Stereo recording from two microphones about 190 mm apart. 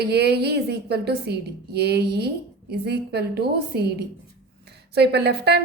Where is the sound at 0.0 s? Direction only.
60° right (ahead or behind).